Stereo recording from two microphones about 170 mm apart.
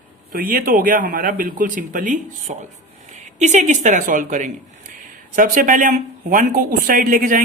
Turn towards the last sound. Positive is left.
turn(degrees=-55)  # may be behind; listen again after turning